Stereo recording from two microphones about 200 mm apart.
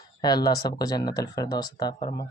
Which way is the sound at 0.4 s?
20° left (ahead or behind).